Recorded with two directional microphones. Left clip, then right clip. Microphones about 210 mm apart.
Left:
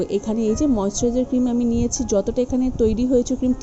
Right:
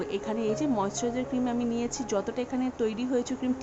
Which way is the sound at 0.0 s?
20° left (ahead or behind).